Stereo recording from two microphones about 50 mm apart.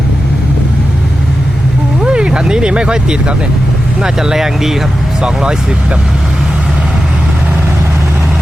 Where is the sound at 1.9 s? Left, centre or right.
Centre.